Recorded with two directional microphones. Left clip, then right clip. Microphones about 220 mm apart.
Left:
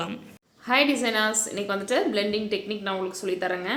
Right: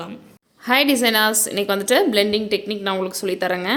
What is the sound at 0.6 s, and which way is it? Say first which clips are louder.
A woman's voice: right 5 dB; 40° right (ahead or behind).